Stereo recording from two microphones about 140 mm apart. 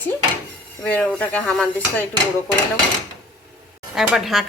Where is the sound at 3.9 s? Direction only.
Centre (ahead or behind).